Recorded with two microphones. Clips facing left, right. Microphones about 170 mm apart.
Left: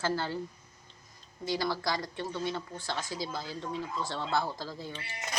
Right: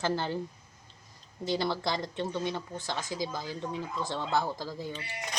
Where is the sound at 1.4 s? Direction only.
25° right (ahead or behind).